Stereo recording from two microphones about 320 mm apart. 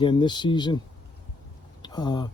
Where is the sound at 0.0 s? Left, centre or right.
Centre.